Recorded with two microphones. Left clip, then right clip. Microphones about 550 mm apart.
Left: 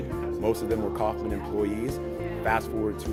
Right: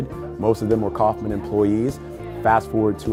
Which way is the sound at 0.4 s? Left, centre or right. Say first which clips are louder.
Right 8 dB; right.